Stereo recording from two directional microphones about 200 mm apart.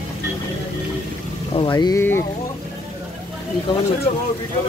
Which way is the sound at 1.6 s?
20° left (ahead or behind).